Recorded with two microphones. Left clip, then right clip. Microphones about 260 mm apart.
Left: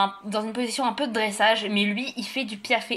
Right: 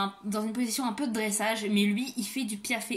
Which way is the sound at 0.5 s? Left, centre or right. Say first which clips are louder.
Left 7 dB; right.